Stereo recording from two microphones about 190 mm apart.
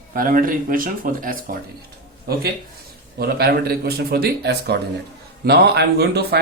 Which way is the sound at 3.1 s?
55° right (ahead or behind).